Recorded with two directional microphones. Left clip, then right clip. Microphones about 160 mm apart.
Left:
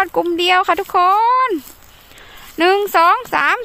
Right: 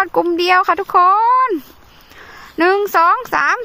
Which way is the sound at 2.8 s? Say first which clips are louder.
Even; 5° right (ahead or behind).